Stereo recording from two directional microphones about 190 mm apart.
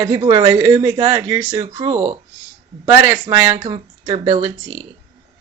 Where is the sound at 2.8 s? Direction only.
15° right (ahead or behind).